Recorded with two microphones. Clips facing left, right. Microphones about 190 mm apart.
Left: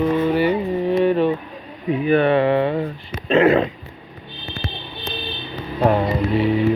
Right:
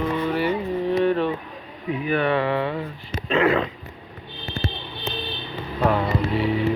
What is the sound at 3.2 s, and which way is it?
Speech, 25° left (ahead or behind).